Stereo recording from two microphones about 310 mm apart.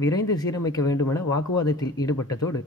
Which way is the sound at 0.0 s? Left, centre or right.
Centre.